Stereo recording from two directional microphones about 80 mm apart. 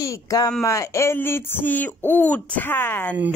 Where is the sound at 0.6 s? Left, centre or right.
Left.